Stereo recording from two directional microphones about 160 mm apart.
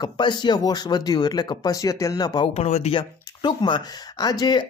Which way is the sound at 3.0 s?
30° left (ahead or behind).